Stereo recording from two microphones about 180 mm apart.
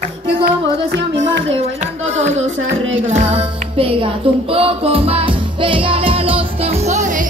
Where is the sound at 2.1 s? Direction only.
40° right (ahead or behind).